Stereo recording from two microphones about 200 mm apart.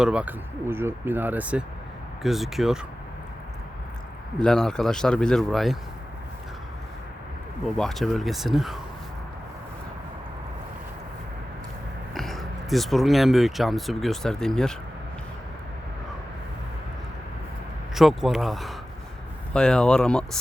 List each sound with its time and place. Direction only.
0.0 s a man's voice: 5° right (ahead or behind)
4.4 s a man's voice: 5° left (ahead or behind)
7.8 s a man's voice: centre (ahead or behind)
12.1 s speech: centre (ahead or behind)
17.9 s a man's voice: centre (ahead or behind)